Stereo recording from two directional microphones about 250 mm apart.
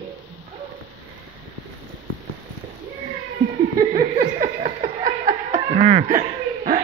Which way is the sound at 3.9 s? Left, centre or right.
Right.